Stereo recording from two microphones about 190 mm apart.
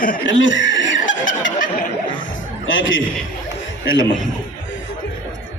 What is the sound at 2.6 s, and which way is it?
Speech, 90° left.